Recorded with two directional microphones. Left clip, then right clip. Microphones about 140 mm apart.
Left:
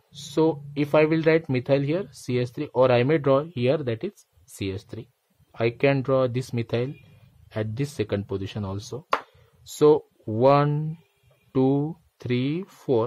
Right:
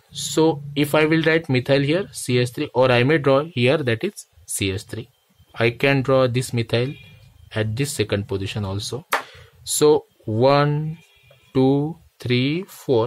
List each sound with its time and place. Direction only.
0.1 s speech: 20° left (ahead or behind)
8.9 s music: 10° left (ahead or behind)
9.8 s speech: 25° left (ahead or behind)